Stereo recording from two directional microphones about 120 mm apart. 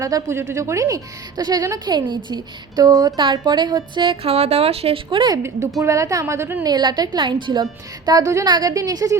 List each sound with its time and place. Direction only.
0.0 s a woman's voice: 25° right (ahead or behind); by 5.2 s 55° right (ahead or behind)
5.8 s speech: 25° right (ahead or behind)
6.7 s a woman's voice: 35° right (ahead or behind)